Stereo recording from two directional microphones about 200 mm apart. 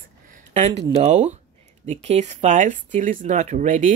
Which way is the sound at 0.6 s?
35° right (ahead or behind).